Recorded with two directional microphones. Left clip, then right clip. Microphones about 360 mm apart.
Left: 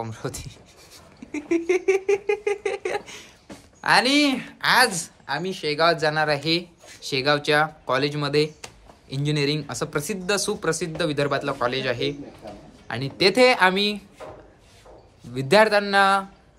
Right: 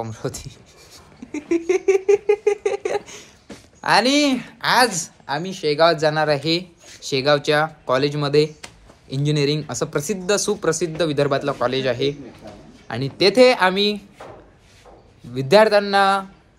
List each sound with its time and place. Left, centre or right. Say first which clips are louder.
0.0 s speech: right 3 dB; centre
1.3 s a sound: right 2 dB; centre
3.8 s speech: right 2 dB; centre
15.3 s speech: right 3 dB; centre